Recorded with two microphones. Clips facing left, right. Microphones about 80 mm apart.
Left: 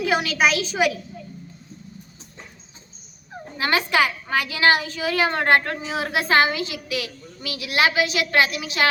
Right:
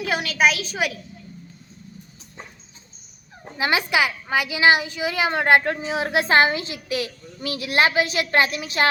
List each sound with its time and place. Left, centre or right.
0.0 s a woman's voice: centre
3.6 s a woman's voice: centre; by 8.9 s right